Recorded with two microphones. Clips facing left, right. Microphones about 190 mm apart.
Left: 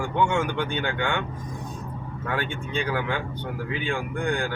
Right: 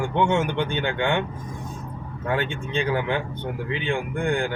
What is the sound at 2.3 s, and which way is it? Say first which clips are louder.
Speech: right 3 dB; 25° right (ahead or behind).